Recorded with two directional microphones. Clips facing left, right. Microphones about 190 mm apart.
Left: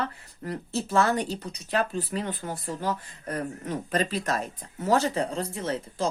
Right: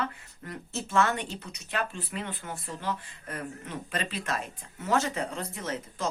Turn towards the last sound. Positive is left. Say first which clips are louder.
# left 4 dB
turn(degrees=30)  # may be behind; listen again after turning